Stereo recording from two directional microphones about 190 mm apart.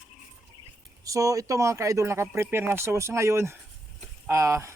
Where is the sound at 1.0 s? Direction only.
20° right (ahead or behind).